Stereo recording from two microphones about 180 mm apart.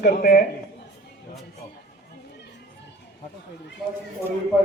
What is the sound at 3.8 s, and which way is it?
Speech, centre (ahead or behind).